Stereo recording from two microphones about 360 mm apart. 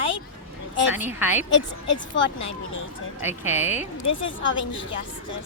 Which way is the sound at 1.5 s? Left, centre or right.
Left.